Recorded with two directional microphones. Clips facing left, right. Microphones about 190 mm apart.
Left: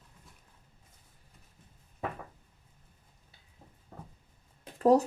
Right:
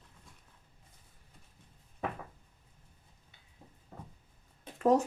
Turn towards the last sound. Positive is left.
turn(degrees=35)  # may be behind; listen again after turning